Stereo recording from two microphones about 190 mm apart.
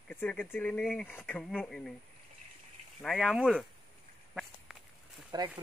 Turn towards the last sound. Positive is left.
turn(degrees=-20)  # may be behind; listen again after turning